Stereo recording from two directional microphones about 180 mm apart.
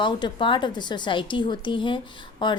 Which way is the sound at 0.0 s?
25° left (ahead or behind).